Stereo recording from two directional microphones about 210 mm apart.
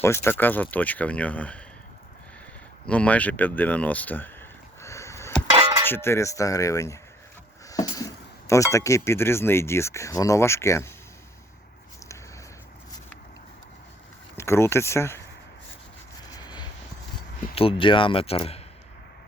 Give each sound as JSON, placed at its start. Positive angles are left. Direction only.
{"t": 0.0, "sound": "speech", "side_deg": 10}
{"t": 2.8, "sound": "a sound", "side_deg": 5}
{"t": 5.5, "sound": "a sound", "side_deg": -25}
{"t": 5.9, "sound": "speech", "side_deg": 10}
{"t": 14.3, "sound": "speech", "side_deg": 15}
{"t": 16.3, "sound": "vehicle", "side_deg": 20}
{"t": 17.5, "sound": "speech", "side_deg": 25}